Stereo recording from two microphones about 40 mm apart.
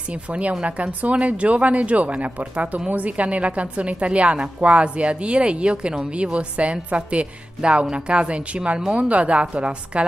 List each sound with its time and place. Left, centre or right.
0.1 s a woman's voice: right